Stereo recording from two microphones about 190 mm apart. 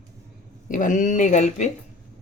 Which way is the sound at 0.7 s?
40° left (ahead or behind).